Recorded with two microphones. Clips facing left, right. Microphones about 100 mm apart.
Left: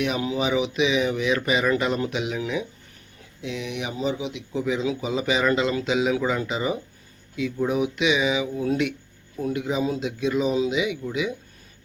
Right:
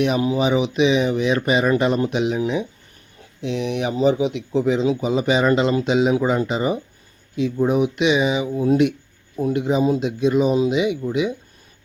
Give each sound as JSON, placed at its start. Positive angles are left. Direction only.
{"t": 0.0, "sound": "speech", "side_deg": -35}
{"t": 10.0, "sound": "speech", "side_deg": -25}